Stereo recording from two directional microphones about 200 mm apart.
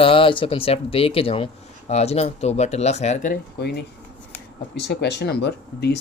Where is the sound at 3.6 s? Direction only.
55° left (ahead or behind).